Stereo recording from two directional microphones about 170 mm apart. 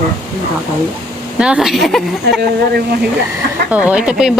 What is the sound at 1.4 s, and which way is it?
Speech, 5° right (ahead or behind).